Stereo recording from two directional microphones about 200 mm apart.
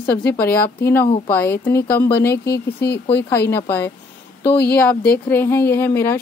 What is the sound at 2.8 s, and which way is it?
Speech, 55° left (ahead or behind).